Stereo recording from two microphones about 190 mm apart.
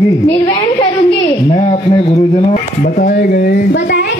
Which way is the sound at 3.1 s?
65° left (ahead or behind).